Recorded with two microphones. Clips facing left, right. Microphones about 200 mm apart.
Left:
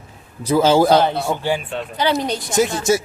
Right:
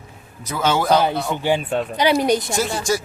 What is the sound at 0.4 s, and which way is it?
Speech, 30° left (ahead or behind).